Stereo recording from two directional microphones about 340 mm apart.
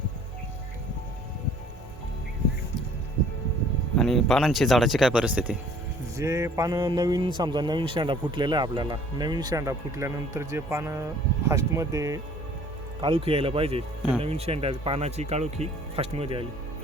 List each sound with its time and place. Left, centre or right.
3.9 s speech: centre